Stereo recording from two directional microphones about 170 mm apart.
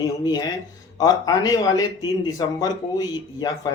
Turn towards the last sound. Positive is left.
turn(degrees=25)  # may be behind; listen again after turning